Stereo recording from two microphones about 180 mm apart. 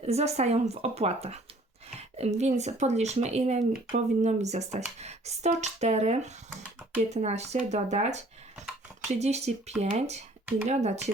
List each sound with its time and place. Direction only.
0.0 s speech: 35° right (ahead or behind)